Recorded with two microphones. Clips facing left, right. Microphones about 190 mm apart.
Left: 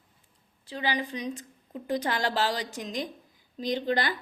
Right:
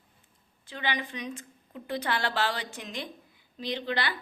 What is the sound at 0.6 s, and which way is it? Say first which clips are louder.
A woman's voice: left 3 dB; 35° left (ahead or behind).